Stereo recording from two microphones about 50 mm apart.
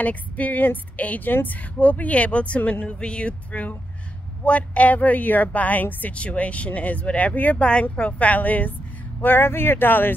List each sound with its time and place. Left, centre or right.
0.0 s speech: left
6.1 s speech: left
9.4 s speech: left